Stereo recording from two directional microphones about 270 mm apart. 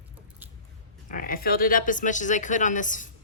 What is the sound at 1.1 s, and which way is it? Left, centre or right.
Speech, left.